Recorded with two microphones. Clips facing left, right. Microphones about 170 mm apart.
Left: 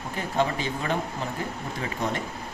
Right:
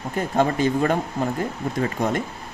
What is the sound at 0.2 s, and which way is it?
A man's voice, 45° right (ahead or behind).